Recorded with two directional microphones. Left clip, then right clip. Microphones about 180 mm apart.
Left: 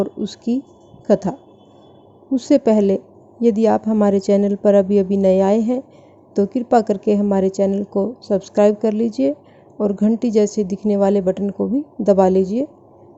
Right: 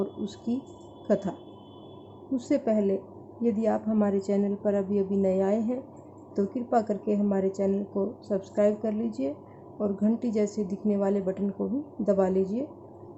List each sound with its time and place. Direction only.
0.0 s a woman's voice: 35° left (ahead or behind)